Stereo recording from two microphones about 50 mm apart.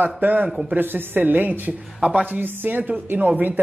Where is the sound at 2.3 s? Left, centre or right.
Right.